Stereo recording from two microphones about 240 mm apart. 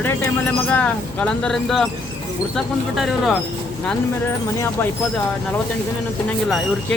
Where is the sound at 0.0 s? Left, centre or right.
Centre.